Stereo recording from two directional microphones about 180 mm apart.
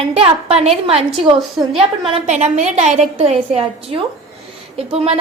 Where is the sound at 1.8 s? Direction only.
30° right (ahead or behind).